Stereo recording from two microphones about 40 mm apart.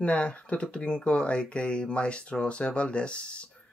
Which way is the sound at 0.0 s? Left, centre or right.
Left.